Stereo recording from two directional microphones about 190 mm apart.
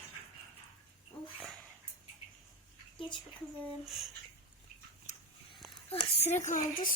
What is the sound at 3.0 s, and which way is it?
Speech, 25° left (ahead or behind).